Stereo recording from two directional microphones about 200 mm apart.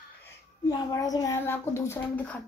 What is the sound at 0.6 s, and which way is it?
A child's voice, 20° left (ahead or behind).